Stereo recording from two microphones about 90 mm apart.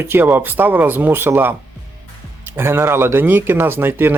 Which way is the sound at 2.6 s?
25° right (ahead or behind).